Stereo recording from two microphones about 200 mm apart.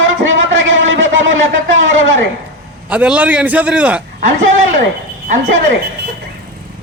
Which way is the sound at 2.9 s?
5° right (ahead or behind).